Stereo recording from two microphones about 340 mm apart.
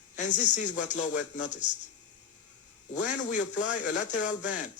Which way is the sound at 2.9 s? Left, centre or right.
Left.